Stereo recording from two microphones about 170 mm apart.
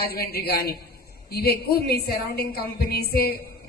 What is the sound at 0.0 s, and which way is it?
A woman's voice, 65° left (ahead or behind).